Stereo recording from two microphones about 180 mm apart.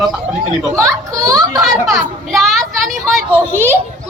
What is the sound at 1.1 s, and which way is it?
Speech, 20° right (ahead or behind).